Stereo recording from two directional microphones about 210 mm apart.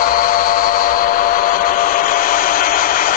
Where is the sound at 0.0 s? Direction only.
40° left (ahead or behind).